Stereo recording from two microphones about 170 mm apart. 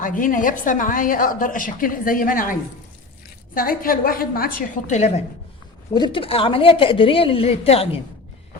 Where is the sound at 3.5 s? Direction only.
55° left (ahead or behind).